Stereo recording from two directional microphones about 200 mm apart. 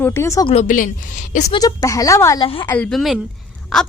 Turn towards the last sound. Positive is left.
turn(degrees=0)  # may be behind; listen again after turning